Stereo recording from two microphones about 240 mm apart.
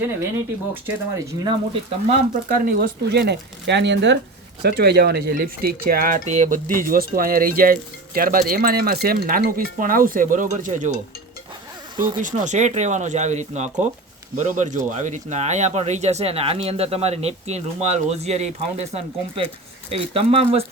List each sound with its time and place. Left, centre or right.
0.7 s speech: centre
2.3 s speech: right
12.2 s speech: right
19.9 s speech: right